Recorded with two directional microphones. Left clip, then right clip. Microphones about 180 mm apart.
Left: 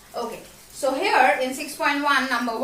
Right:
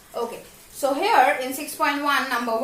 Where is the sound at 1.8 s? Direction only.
25° right (ahead or behind).